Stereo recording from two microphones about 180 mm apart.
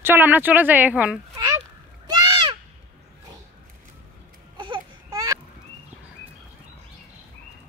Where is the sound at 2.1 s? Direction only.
25° right (ahead or behind).